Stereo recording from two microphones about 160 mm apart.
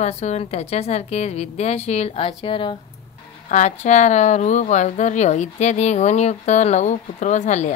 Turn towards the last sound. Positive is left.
turn(degrees=45)  # may be behind; listen again after turning